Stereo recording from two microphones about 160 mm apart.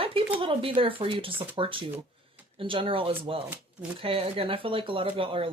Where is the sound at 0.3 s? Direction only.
35° right (ahead or behind).